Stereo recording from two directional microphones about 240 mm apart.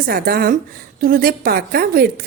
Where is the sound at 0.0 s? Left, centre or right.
Right.